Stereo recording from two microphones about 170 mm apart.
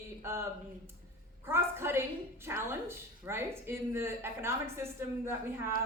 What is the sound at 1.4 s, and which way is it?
Speech, 15° right (ahead or behind).